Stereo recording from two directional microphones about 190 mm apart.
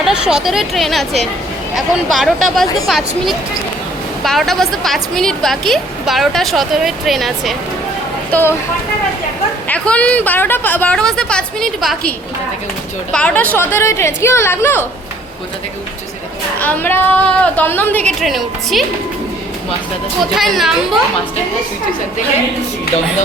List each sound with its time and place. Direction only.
0.0 s a woman's voice: 5° right (ahead or behind)
8.3 s speech: 10° left (ahead or behind)
9.6 s a woman's voice: 5° left (ahead or behind)
16.6 s a woman's voice: 10° left (ahead or behind)
20.3 s a woman's voice: centre (ahead or behind)